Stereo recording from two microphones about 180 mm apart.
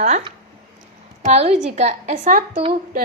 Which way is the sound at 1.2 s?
35° right (ahead or behind).